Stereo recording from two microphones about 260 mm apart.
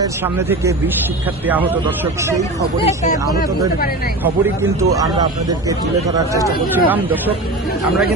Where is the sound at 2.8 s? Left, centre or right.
Left.